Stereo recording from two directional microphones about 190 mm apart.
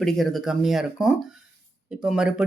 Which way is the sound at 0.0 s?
Centre (ahead or behind).